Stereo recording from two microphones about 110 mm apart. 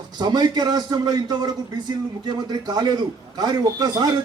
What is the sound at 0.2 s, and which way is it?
A man's voice, 40° right (ahead or behind).